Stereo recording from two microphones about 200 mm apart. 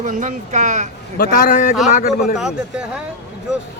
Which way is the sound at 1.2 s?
45° left (ahead or behind).